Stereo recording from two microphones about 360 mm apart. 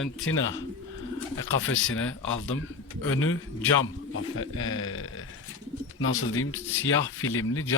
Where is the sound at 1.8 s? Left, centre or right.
Left.